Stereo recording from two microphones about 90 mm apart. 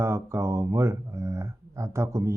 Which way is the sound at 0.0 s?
30° right (ahead or behind).